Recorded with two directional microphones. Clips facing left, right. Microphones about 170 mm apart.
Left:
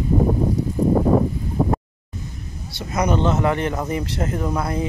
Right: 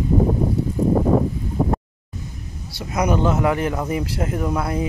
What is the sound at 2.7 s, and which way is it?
Speech, 10° right (ahead or behind).